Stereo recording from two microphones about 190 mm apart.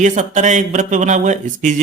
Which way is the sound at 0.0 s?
40° right (ahead or behind).